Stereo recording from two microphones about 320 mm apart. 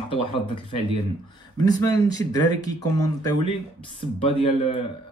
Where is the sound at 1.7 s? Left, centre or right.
Centre.